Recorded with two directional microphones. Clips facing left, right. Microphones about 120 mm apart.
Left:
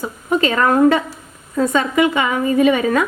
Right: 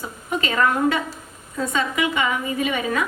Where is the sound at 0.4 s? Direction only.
45° left (ahead or behind).